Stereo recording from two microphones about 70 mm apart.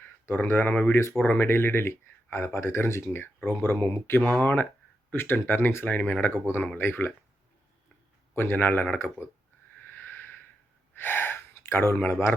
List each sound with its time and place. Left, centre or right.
0.0 s speech: left
8.4 s speech: left
9.9 s a sound: left
10.9 s gasp: left